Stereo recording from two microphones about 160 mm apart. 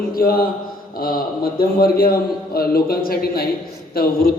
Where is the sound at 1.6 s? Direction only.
70° left (ahead or behind).